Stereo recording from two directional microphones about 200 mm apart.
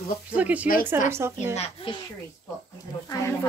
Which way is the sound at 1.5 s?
30° left (ahead or behind).